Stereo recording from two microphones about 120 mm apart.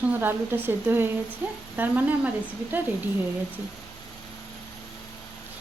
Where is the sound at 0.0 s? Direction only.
15° right (ahead or behind).